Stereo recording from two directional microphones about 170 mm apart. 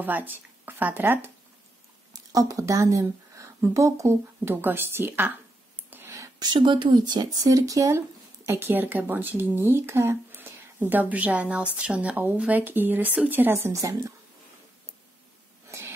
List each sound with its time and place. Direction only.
0.0 s a woman's voice: 10° right (ahead or behind)